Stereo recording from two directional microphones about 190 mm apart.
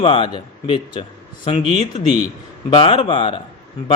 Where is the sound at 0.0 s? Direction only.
25° left (ahead or behind).